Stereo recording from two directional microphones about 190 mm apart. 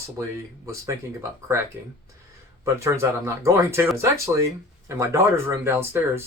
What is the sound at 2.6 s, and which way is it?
Speech, 15° right (ahead or behind).